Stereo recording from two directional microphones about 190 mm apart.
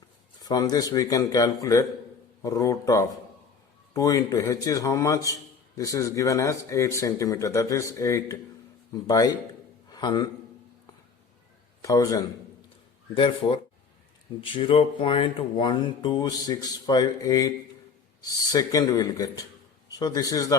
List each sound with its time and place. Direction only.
0.4 s a man's voice: 20° left (ahead or behind)
11.8 s a man's voice: 15° left (ahead or behind)
13.1 s speech: 25° left (ahead or behind)